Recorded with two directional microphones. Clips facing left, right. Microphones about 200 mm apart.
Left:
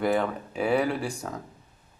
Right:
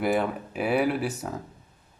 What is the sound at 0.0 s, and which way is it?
A man's voice, 5° right (ahead or behind).